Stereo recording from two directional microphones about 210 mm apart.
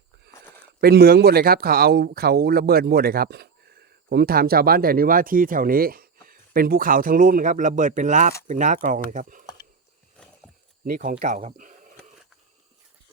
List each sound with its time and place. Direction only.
0.8 s speech: 50° right (ahead or behind)
10.8 s speech: 45° right (ahead or behind)
11.1 s speech: 30° right (ahead or behind)